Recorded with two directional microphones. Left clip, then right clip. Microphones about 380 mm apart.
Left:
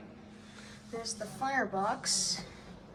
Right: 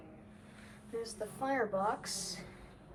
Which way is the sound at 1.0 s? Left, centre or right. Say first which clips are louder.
Left 3 dB; centre.